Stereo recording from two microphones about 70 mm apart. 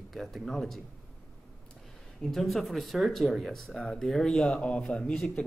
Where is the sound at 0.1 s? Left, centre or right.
Centre.